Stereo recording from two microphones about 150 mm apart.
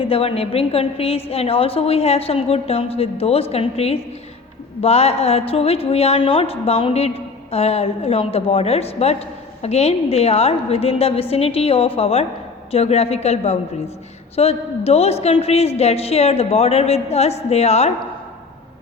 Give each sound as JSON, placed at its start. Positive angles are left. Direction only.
{"t": 0.0, "sound": "a woman's voice", "side_deg": 40}